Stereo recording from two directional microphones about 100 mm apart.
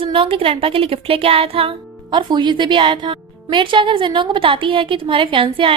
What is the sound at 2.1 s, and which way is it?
A woman's voice, 50° right (ahead or behind).